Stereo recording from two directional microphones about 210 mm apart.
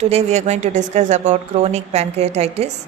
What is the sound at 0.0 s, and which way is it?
A woman's voice, 30° right (ahead or behind).